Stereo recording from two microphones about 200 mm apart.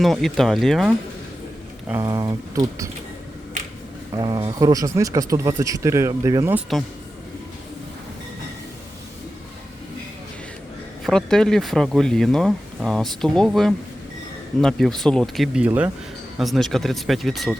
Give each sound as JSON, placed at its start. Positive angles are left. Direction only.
{"t": 0.0, "sound": "speech", "side_deg": 0}
{"t": 1.9, "sound": "speech", "side_deg": -15}
{"t": 4.1, "sound": "speech", "side_deg": -20}
{"t": 11.0, "sound": "speech", "side_deg": 5}